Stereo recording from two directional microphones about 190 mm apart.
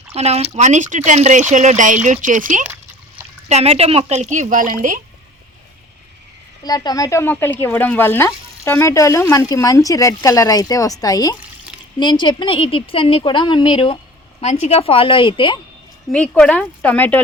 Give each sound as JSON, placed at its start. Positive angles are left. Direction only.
{"t": 0.1, "sound": "speech", "side_deg": -35}
{"t": 6.6, "sound": "a woman's voice", "side_deg": 20}
{"t": 16.1, "sound": "speech", "side_deg": 5}